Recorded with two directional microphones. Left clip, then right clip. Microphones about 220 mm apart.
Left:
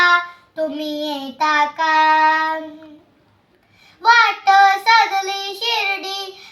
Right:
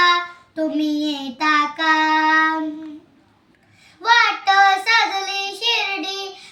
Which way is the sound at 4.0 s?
15° left (ahead or behind).